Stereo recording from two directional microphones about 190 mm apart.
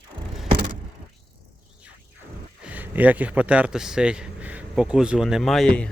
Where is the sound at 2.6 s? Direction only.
10° right (ahead or behind).